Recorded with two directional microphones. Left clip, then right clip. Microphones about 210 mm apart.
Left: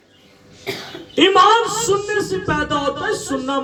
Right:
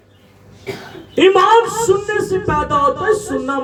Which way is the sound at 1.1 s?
55° right (ahead or behind).